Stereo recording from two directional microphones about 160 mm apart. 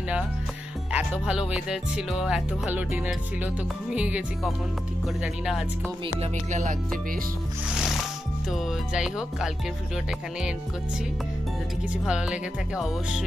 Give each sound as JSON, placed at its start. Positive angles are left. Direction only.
{"t": 0.9, "sound": "speech", "side_deg": -5}
{"t": 6.5, "sound": "music", "side_deg": -50}
{"t": 7.7, "sound": "speech", "side_deg": 0}
{"t": 12.1, "sound": "speech", "side_deg": -5}